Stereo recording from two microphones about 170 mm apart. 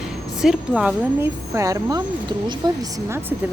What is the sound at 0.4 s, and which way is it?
Speech, 5° right (ahead or behind).